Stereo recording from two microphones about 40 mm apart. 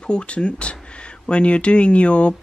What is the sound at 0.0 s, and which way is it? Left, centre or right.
Speech, left.